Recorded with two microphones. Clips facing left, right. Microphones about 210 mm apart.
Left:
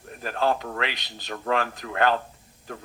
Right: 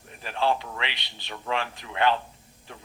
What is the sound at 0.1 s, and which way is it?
Speech, 45° left (ahead or behind).